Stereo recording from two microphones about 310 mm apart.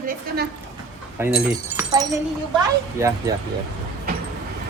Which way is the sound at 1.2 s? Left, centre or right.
Centre.